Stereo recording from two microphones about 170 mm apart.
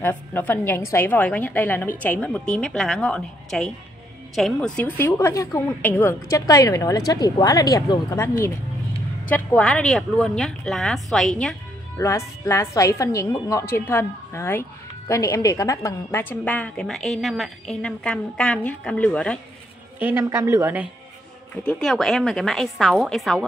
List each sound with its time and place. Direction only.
0.0 s a woman's voice: 10° left (ahead or behind)
9.3 s speech: 5° left (ahead or behind)
12.0 s a woman's voice: 15° left (ahead or behind)
20.0 s a woman's voice: 10° right (ahead or behind)
21.6 s speech: 5° left (ahead or behind)